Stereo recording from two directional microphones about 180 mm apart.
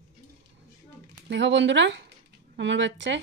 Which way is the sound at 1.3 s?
80° right.